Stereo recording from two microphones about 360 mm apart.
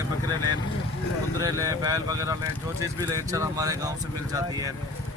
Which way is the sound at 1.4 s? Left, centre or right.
Centre.